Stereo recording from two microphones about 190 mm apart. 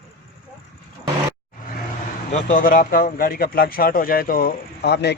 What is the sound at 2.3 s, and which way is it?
A man's voice, 45° left (ahead or behind).